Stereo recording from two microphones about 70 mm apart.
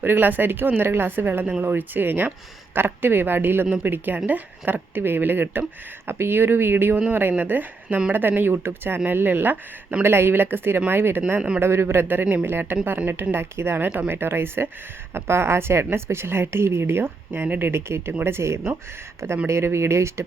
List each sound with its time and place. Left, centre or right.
0.0 s speech: right
11.3 s speech: centre
11.6 s speech: right